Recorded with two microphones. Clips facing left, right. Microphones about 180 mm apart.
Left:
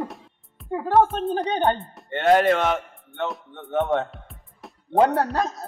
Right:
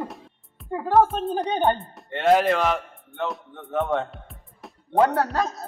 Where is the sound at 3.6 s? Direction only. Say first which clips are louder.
Left 2 dB; centre (ahead or behind).